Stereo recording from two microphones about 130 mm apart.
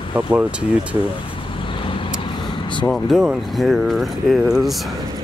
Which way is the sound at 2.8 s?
Centre (ahead or behind).